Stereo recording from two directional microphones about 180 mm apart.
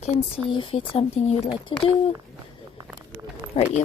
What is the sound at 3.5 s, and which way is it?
Speech, 30° left (ahead or behind).